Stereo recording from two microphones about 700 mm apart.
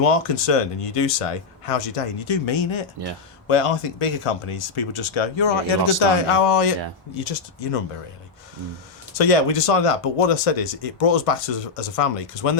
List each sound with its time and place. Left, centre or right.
0.1 s speech: left
9.1 s speech: left